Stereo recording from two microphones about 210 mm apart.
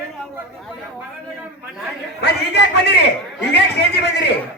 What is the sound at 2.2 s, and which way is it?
Speech, 50° left (ahead or behind).